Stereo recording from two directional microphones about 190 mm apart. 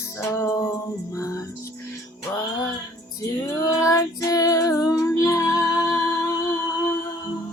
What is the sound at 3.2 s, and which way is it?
Female singing, 15° left (ahead or behind).